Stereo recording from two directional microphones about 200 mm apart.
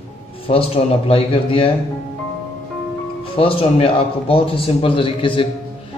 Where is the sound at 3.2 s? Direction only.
25° left (ahead or behind).